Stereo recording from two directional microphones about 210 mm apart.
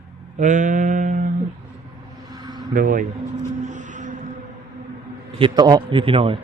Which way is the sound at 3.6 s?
35° right (ahead or behind).